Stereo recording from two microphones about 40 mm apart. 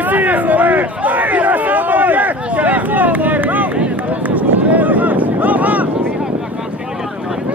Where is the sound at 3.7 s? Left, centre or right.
Right.